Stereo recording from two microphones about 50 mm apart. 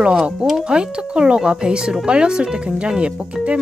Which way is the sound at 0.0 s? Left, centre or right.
Centre.